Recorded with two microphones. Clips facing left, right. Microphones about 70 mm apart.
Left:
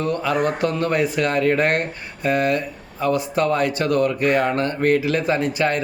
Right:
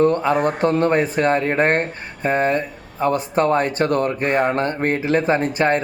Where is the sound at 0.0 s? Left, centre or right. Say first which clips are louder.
Right 4 dB; right.